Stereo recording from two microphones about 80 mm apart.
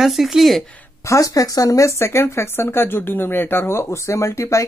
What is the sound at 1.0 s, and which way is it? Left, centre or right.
Speech, left.